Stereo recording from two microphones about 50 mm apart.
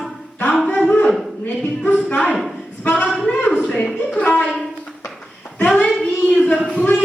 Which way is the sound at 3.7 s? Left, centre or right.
Centre.